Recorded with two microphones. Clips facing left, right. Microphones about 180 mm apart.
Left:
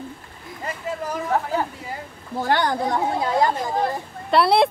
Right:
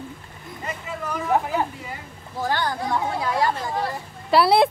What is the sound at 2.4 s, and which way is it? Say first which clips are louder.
Speech: left 4 dB; 65° left (ahead or behind).